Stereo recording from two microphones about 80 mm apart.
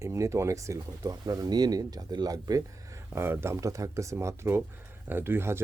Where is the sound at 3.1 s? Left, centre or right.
Right.